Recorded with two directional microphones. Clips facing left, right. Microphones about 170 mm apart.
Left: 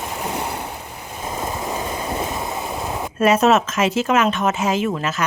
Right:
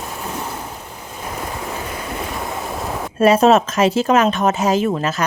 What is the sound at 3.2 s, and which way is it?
A woman's voice, 30° right (ahead or behind).